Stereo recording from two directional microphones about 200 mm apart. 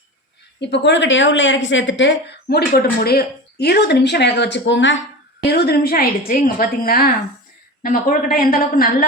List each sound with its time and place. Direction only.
0.6 s speech: 60° left (ahead or behind)
5.5 s a woman's voice: 55° left (ahead or behind)